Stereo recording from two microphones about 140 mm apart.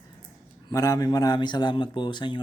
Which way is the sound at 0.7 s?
25° left (ahead or behind).